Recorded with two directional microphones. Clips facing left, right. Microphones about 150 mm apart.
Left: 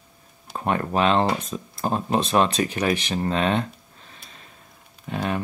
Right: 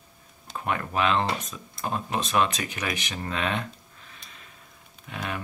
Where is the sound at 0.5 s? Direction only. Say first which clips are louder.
Left 5 dB; 35° left (ahead or behind).